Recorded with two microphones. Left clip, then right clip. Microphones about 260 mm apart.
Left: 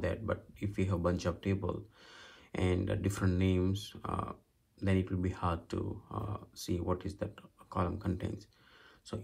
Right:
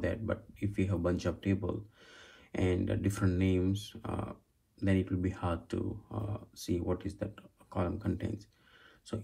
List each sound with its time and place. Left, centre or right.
0.0 s speech: left